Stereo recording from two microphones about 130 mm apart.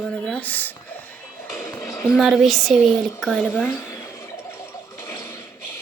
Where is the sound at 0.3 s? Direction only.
10° left (ahead or behind).